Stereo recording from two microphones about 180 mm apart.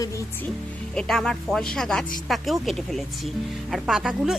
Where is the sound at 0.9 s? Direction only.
5° left (ahead or behind).